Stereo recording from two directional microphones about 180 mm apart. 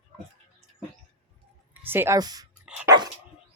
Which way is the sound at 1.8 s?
10° right (ahead or behind).